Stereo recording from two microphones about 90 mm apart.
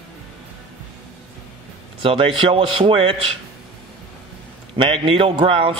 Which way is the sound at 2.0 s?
90° right.